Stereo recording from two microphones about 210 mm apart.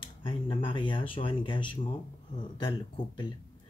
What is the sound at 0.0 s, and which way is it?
Speech, 25° left (ahead or behind).